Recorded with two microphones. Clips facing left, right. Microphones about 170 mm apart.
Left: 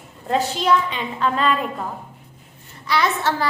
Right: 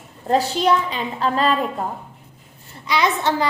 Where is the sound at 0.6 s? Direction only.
35° right (ahead or behind).